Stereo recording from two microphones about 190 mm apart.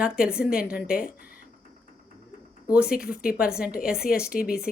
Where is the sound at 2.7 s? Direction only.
5° right (ahead or behind).